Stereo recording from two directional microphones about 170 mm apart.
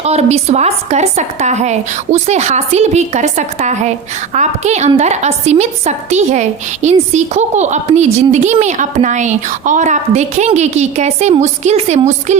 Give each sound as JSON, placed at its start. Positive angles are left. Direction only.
{"t": 0.0, "sound": "a woman's voice", "side_deg": -40}